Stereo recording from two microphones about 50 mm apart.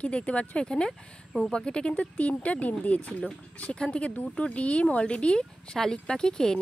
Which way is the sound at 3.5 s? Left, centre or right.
Left.